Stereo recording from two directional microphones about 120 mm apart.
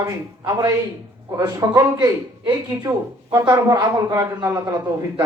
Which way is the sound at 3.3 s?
30° right (ahead or behind).